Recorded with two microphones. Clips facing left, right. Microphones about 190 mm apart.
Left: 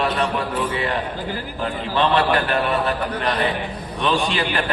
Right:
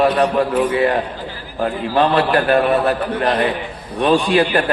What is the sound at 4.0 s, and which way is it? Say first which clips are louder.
Speech: right 7 dB; 50° right (ahead or behind).